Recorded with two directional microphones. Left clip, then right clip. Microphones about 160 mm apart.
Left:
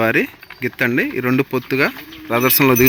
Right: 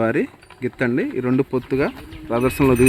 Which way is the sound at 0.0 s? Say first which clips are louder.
Left 4 dB; 10° right (ahead or behind).